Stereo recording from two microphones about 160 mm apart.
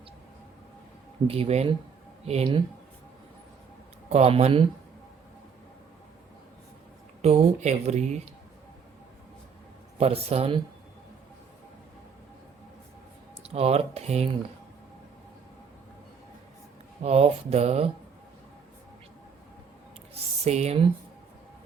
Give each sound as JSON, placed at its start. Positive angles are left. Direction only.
{"t": 1.3, "sound": "speech", "side_deg": -40}
{"t": 4.1, "sound": "speech", "side_deg": -40}
{"t": 7.2, "sound": "speech", "side_deg": -40}
{"t": 10.0, "sound": "speech", "side_deg": -40}
{"t": 13.4, "sound": "speech", "side_deg": -40}
{"t": 17.0, "sound": "speech", "side_deg": -40}
{"t": 20.1, "sound": "speech", "side_deg": -40}